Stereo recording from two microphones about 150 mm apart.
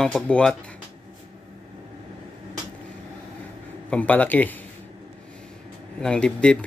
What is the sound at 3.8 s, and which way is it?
Speech, 10° left (ahead or behind).